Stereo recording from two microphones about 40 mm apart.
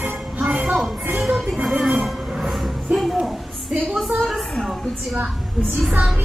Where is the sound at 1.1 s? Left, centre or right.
Centre.